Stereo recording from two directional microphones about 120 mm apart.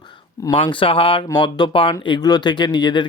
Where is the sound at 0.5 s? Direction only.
45° left (ahead or behind).